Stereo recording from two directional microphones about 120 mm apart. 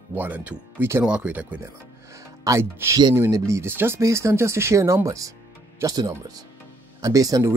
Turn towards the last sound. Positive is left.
turn(degrees=-30)  # may be behind; listen again after turning